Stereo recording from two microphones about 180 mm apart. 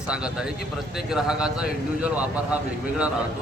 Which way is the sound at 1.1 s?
5° right (ahead or behind).